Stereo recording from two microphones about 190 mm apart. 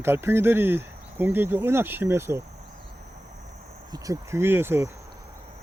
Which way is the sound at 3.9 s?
15° right (ahead or behind).